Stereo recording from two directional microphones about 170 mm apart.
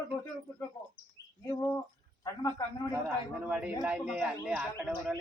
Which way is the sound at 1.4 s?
10° left (ahead or behind).